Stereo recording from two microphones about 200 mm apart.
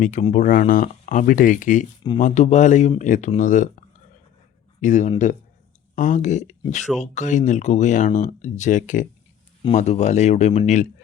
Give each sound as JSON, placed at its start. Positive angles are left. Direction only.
{"t": 0.0, "sound": "speech", "side_deg": 40}
{"t": 4.8, "sound": "speech", "side_deg": 40}